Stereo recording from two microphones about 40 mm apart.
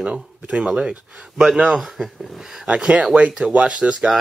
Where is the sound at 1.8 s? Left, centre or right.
Centre.